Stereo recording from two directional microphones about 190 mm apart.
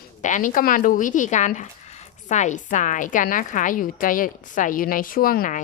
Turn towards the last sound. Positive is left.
turn(degrees=45)  # may be behind; listen again after turning